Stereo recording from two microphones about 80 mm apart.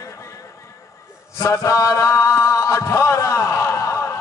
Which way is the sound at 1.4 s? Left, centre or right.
Left.